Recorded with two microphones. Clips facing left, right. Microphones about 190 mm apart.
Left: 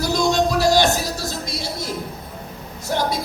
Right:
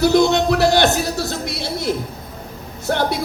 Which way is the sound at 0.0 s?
65° right (ahead or behind).